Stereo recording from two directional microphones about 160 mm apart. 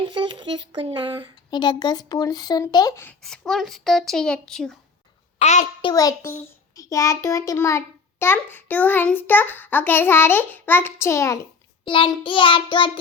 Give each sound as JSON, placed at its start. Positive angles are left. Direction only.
{"t": 0.0, "sound": "speech", "side_deg": -30}
{"t": 1.5, "sound": "speech", "side_deg": 30}
{"t": 3.2, "sound": "a child's voice", "side_deg": 5}
{"t": 5.4, "sound": "a child's voice", "side_deg": 45}
{"t": 5.8, "sound": "a child's voice", "side_deg": 20}
{"t": 11.9, "sound": "child singing", "side_deg": 30}